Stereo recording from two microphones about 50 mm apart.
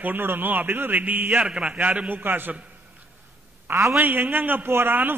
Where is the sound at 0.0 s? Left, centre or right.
Right; by 1.8 s centre.